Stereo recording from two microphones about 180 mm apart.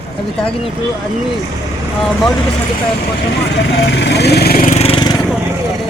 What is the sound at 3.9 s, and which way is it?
Speech, 75° left (ahead or behind).